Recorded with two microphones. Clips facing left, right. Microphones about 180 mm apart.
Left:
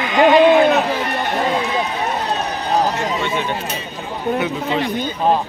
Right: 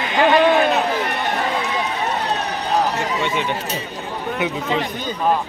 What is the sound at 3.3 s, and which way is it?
Speech, 15° left (ahead or behind).